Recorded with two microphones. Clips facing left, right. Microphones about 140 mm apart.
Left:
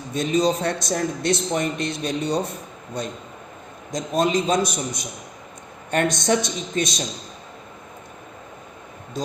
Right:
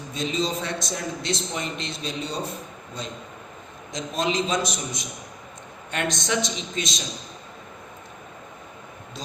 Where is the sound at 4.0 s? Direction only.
45° left (ahead or behind).